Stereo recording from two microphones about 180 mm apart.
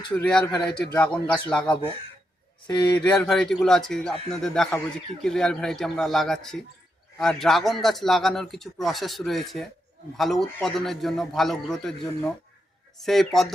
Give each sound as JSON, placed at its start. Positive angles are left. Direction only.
{"t": 0.2, "sound": "a man's voice", "side_deg": 5}
{"t": 2.6, "sound": "speech", "side_deg": 20}
{"t": 3.2, "sound": "a man's voice", "side_deg": 0}